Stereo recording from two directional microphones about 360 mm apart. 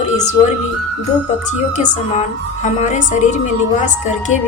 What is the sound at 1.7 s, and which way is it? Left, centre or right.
Speech, centre.